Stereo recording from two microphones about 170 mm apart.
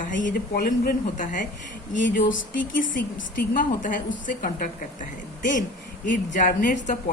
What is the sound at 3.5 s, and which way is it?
A woman's voice, 50° left (ahead or behind).